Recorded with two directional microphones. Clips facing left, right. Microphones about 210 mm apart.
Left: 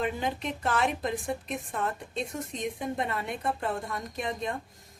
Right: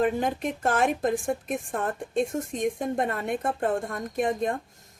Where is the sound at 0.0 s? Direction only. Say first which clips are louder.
Right 6 dB; 45° right (ahead or behind).